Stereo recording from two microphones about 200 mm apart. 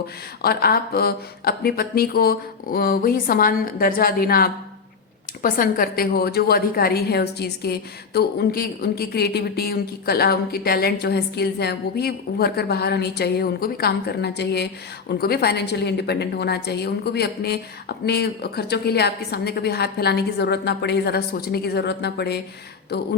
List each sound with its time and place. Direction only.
0.4 s a woman's voice: 50° left (ahead or behind)